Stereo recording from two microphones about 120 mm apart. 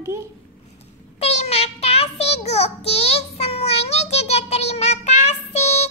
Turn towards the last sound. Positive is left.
turn(degrees=65)  # may be behind; listen again after turning